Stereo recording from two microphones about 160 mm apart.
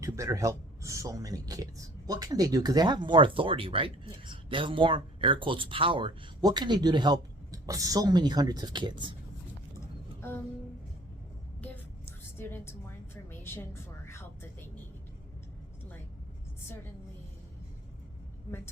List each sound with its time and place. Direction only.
0.0 s speech: 20° right (ahead or behind)
10.2 s music: 15° left (ahead or behind)
12.4 s a woman's voice: 15° left (ahead or behind)
13.4 s a sound: 15° left (ahead or behind)